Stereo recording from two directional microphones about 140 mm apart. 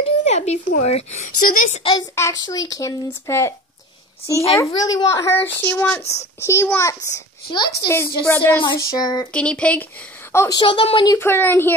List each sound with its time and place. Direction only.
0.0 s a woman's voice: 55° left (ahead or behind)
1.7 s speech: 40° left (ahead or behind)
2.1 s a woman's voice: 25° left (ahead or behind)
4.6 s a woman's voice: 25° left (ahead or behind)
8.6 s a woman's voice: 30° left (ahead or behind)
9.3 s speech: 10° left (ahead or behind)
10.6 s speech: 40° left (ahead or behind)
11.1 s speech: 15° left (ahead or behind)